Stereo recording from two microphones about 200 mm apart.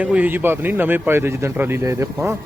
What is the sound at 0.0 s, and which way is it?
A man's voice, 5° right (ahead or behind).